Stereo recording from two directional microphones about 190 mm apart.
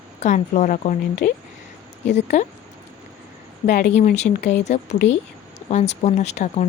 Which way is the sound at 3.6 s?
45° left (ahead or behind).